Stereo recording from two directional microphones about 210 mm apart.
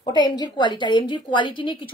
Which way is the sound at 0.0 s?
20° left (ahead or behind).